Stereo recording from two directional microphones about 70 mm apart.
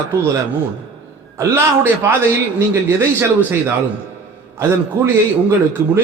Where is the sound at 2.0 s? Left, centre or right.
Right.